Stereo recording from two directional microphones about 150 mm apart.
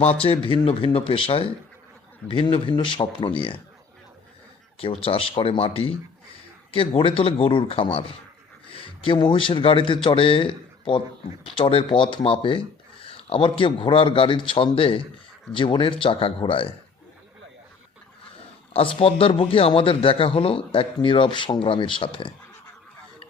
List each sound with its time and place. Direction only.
0.0 s speech: 40° left (ahead or behind)
4.8 s speech: 40° left (ahead or behind)
18.7 s speech: 40° left (ahead or behind)